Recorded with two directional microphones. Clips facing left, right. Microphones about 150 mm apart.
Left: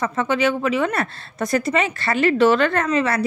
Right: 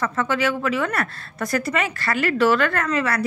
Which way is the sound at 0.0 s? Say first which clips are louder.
Left 2 dB; 20° left (ahead or behind).